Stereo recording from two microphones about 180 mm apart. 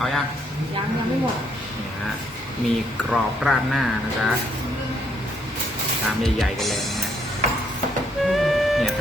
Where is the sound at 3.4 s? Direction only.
Centre (ahead or behind).